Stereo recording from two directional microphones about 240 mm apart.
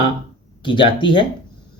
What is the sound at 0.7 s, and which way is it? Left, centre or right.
Speech, left.